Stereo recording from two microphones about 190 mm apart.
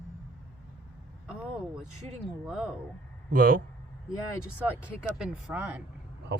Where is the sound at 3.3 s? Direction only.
50° right (ahead or behind).